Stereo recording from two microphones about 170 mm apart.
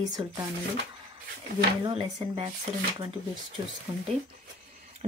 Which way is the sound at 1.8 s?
25° right (ahead or behind).